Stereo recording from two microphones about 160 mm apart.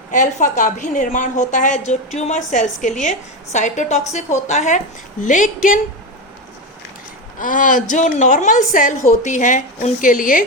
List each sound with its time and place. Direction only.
0.1 s a woman's voice: 50° left (ahead or behind)
7.3 s a woman's voice: 55° left (ahead or behind)